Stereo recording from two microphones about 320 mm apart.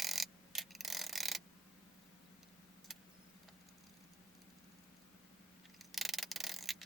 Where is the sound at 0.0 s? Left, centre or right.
Centre.